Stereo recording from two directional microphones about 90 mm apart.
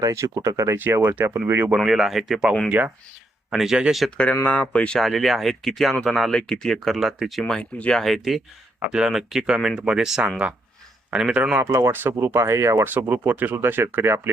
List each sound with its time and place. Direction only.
0.0 s speech: 35° right (ahead or behind)
0.8 s speech: 25° right (ahead or behind)
1.7 s speech: 5° right (ahead or behind)
2.6 s speech: 20° right (ahead or behind)
3.5 s speech: 5° right (ahead or behind)
4.6 s speech: 10° left (ahead or behind)
4.9 s speech: centre (ahead or behind)
11.6 s speech: 30° right (ahead or behind)
12.8 s speech: 20° right (ahead or behind)